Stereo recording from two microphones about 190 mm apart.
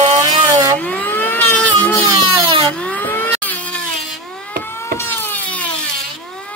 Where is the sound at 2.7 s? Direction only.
5° left (ahead or behind).